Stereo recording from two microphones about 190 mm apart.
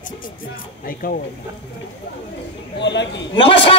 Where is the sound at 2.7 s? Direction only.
65° left (ahead or behind).